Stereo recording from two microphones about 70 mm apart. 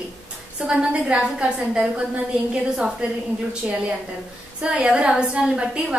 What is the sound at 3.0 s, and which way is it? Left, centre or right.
Speech, centre.